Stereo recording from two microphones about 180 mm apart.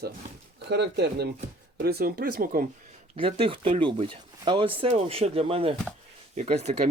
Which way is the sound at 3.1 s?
30° right (ahead or behind).